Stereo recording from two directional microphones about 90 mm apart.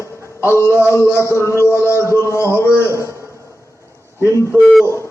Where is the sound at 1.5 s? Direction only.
30° left (ahead or behind).